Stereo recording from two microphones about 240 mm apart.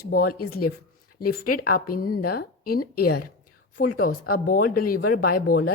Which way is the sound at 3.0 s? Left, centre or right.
Left.